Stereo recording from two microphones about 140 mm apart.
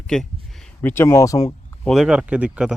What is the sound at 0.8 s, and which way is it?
Speech, 15° left (ahead or behind).